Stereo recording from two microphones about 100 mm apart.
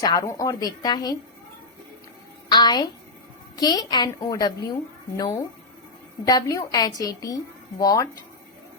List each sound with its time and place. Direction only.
0.0 s a woman's voice: 40° left (ahead or behind)
2.5 s a sound: 45° left (ahead or behind)
3.5 s a woman's voice: 40° left (ahead or behind)